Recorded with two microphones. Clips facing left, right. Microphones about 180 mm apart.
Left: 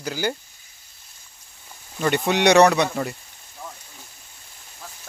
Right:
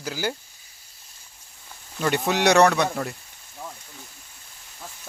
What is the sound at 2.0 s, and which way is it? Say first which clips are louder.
Speech: left 2 dB; centre (ahead or behind).